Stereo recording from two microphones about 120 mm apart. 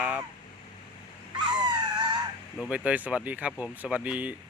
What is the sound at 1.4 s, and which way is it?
Dog, 40° right (ahead or behind).